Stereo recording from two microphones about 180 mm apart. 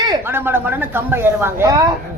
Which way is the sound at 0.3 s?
10° right (ahead or behind).